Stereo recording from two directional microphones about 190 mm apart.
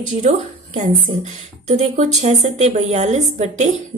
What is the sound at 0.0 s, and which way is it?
A woman's voice, 40° right (ahead or behind).